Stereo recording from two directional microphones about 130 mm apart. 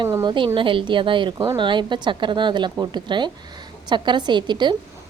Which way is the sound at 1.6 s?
40° right (ahead or behind).